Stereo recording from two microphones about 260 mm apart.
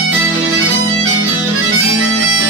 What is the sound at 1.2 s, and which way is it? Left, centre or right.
Music, right.